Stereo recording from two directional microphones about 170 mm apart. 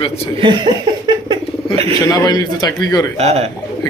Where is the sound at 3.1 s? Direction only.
40° right (ahead or behind).